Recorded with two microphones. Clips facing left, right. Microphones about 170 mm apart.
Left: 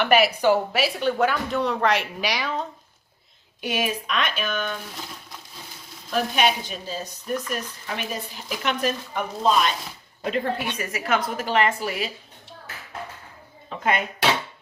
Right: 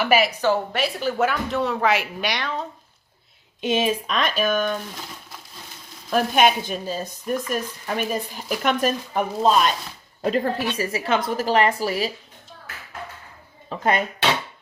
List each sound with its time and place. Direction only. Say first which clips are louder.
0.0 s speech: even; 5° right (ahead or behind)
0.4 s speech: left 1 dB; 5° left (ahead or behind)
3.6 s a woman's voice: right 5 dB; 25° right (ahead or behind); by 4.7 s 45° right (ahead or behind)
6.1 s a woman's voice: right 4 dB; 50° right (ahead or behind); by 12.1 s 35° right (ahead or behind)
13.7 s speech: right 2 dB; 35° right (ahead or behind)